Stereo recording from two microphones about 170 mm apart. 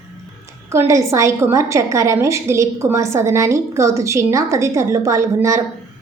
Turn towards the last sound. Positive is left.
turn(degrees=-20)  # may be behind; listen again after turning